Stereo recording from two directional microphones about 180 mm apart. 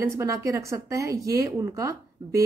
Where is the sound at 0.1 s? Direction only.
15° right (ahead or behind).